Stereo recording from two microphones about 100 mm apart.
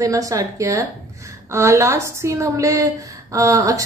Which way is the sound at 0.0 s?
35° right (ahead or behind).